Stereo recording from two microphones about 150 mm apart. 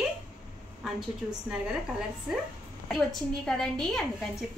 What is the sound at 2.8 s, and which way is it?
A woman's voice, 5° left (ahead or behind).